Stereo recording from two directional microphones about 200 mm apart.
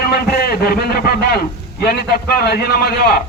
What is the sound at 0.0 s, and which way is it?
A man's voice, 50° left (ahead or behind).